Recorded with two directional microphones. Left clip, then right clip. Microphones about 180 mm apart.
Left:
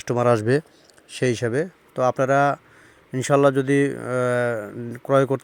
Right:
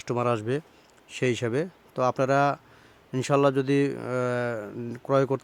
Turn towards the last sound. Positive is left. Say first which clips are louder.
# left 5 dB
turn(degrees=10)  # may be behind; listen again after turning